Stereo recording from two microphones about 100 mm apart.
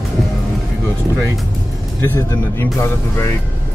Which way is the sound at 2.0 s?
20° left (ahead or behind).